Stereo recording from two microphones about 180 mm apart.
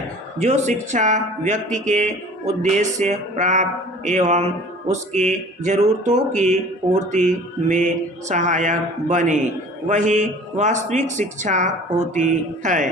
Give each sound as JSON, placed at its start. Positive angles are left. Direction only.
{"t": 0.3, "sound": "a man's voice", "side_deg": -40}